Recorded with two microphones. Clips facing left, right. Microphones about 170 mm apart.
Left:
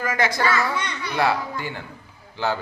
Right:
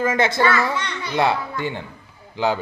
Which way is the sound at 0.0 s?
25° right (ahead or behind).